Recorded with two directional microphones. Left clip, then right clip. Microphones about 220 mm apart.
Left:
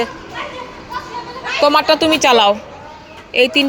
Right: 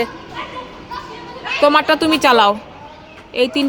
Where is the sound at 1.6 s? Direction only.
15° right (ahead or behind).